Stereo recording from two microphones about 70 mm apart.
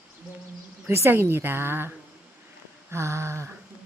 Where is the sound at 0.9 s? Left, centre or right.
Right.